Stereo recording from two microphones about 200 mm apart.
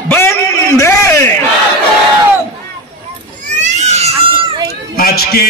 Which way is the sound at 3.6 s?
35° right (ahead or behind).